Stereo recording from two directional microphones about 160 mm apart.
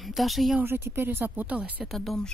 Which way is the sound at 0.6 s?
15° right (ahead or behind).